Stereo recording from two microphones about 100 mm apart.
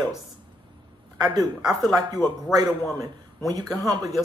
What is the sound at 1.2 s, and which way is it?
A man's voice, 40° right (ahead or behind).